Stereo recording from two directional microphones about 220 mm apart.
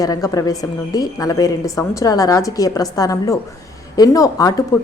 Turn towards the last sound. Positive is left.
turn(degrees=15)  # may be behind; listen again after turning